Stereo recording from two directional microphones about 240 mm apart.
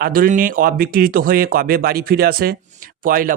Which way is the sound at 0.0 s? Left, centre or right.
Right.